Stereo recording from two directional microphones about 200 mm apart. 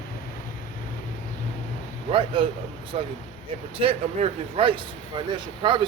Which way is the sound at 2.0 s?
25° right (ahead or behind).